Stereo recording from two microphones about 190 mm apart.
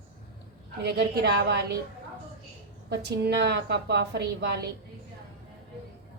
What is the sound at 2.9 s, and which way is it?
A woman's voice, 60° right (ahead or behind).